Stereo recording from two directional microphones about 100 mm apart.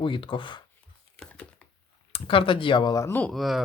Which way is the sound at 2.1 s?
60° left (ahead or behind).